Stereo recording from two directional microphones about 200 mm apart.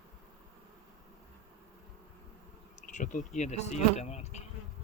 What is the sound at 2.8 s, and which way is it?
Speech, 40° left (ahead or behind).